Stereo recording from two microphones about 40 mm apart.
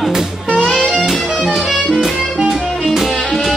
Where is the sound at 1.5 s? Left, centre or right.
Centre.